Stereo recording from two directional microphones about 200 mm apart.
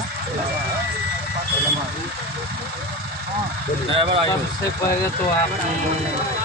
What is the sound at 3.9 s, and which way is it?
Speech, 30° right (ahead or behind).